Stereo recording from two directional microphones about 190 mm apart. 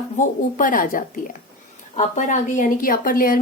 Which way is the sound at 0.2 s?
45° left (ahead or behind).